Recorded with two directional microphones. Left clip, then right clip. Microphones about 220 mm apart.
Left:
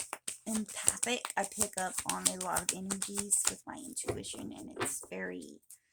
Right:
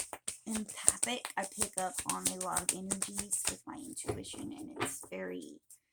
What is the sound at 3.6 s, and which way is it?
Speech, 45° left (ahead or behind).